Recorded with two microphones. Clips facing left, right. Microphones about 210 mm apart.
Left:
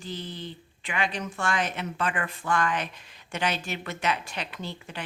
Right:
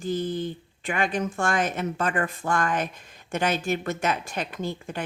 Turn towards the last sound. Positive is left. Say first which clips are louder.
# right 6 dB
turn(degrees=-50)  # may be behind; listen again after turning